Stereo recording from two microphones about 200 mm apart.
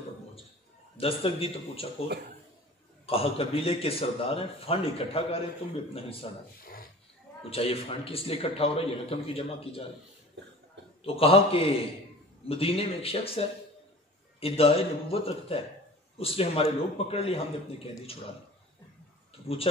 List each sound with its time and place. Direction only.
0.9 s a man's voice: 30° left (ahead or behind)
3.1 s a man's voice: 30° left (ahead or behind)
6.6 s a sound: 45° left (ahead or behind)
7.4 s a man's voice: 30° left (ahead or behind)
11.1 s a man's voice: 30° left (ahead or behind)
14.4 s a man's voice: 30° left (ahead or behind)
19.4 s speech: 30° left (ahead or behind)